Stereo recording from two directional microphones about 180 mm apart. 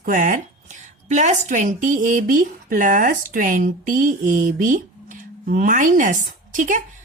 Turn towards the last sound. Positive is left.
turn(degrees=-45)  # may be behind; listen again after turning